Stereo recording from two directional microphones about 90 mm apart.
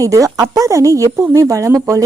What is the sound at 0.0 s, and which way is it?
Speech, 40° right (ahead or behind).